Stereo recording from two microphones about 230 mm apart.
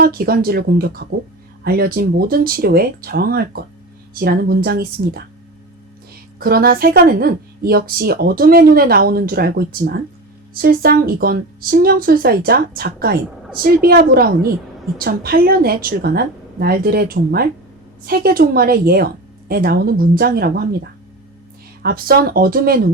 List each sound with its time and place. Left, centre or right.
0.0 s speech: right
6.4 s speech: right
21.8 s speech: right